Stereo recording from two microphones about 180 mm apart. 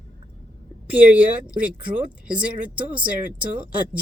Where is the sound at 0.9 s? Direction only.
5° right (ahead or behind).